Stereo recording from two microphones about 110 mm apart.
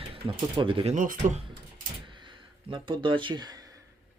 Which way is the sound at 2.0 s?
50° right (ahead or behind).